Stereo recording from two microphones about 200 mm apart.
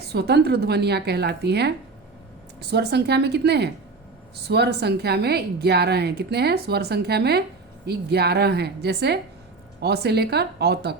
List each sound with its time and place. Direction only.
0.1 s a woman's voice: 55° right (ahead or behind)